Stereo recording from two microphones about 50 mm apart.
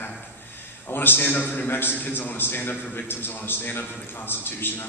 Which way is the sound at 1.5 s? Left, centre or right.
Left.